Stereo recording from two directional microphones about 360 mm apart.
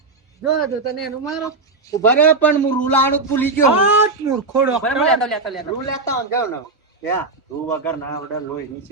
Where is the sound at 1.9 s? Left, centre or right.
Centre.